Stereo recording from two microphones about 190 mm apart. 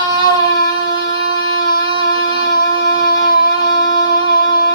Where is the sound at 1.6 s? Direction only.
50° left (ahead or behind).